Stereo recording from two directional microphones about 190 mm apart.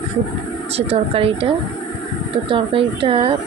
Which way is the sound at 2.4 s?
25° right (ahead or behind).